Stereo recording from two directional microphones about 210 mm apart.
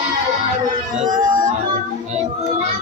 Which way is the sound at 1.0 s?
35° right (ahead or behind).